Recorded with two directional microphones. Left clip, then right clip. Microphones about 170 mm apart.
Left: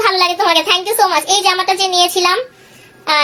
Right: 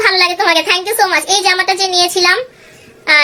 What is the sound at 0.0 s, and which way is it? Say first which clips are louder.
A woman's voice: right 1 dB; 10° right (ahead or behind).